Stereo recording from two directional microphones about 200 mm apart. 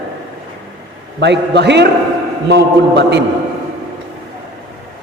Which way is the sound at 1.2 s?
60° right (ahead or behind).